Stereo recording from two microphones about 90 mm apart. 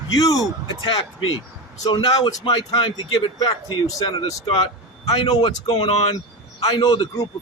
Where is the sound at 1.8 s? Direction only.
65° left (ahead or behind).